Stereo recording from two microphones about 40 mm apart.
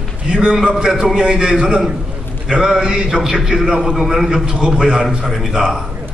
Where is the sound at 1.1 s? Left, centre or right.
Centre.